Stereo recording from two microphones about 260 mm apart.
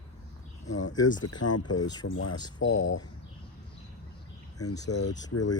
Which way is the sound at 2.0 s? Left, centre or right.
Left.